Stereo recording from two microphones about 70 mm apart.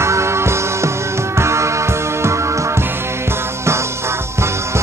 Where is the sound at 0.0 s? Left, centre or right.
Right.